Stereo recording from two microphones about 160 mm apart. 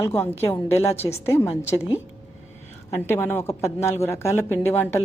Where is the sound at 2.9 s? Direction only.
15° left (ahead or behind).